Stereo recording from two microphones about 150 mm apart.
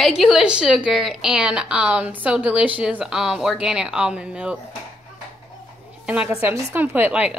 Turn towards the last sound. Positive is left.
turn(degrees=-5)  # may be behind; listen again after turning